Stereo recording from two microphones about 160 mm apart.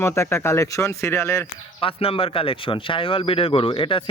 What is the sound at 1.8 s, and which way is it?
Speech, 35° left (ahead or behind).